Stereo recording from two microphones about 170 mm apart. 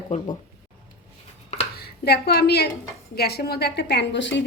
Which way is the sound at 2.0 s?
70° left (ahead or behind).